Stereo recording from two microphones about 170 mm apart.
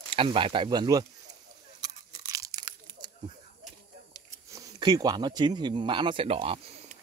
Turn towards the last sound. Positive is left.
turn(degrees=-35)  # may be behind; listen again after turning